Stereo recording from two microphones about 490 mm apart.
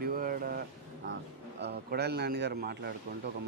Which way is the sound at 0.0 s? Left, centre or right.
Centre.